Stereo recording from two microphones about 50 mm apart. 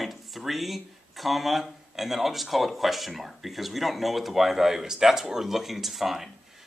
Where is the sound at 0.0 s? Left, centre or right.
Centre.